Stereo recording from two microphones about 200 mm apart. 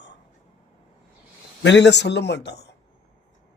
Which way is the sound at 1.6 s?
60° left (ahead or behind).